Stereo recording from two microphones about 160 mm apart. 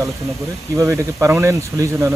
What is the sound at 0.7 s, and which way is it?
Speech, 20° right (ahead or behind).